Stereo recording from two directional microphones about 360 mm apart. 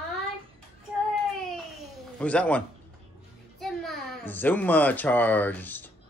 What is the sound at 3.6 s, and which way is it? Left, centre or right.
Speech, centre.